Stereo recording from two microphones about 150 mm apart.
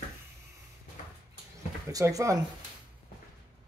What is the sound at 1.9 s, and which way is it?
Speech, 20° right (ahead or behind).